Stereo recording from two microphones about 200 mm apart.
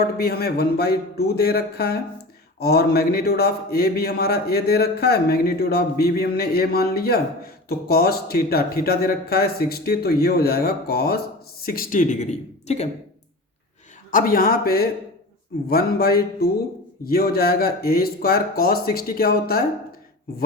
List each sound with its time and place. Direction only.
0.0 s speech: 50° left (ahead or behind); by 12.9 s 35° left (ahead or behind)
14.1 s speech: 45° left (ahead or behind)